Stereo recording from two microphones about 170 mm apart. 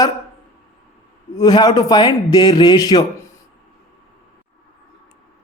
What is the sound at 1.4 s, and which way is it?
A man's voice, 25° left (ahead or behind).